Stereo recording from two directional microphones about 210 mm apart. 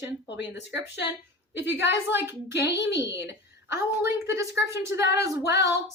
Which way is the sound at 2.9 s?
15° right (ahead or behind).